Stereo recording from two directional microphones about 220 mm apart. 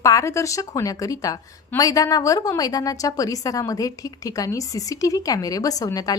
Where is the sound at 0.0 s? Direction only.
15° left (ahead or behind).